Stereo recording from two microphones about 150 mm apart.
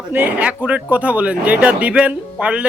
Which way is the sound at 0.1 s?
10° right (ahead or behind).